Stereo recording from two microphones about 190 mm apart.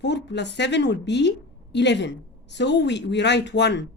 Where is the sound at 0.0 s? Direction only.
65° left (ahead or behind).